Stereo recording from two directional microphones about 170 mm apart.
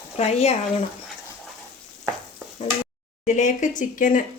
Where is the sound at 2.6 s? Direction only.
40° left (ahead or behind).